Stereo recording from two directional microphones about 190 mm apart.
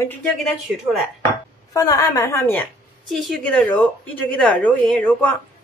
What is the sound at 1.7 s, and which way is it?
Speech, 15° left (ahead or behind).